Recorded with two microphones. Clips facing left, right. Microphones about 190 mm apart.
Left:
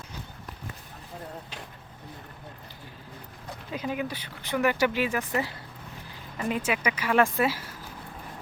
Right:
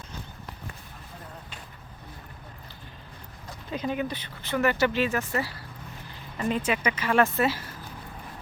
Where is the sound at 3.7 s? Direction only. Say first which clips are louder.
Right 2 dB; 5° left (ahead or behind).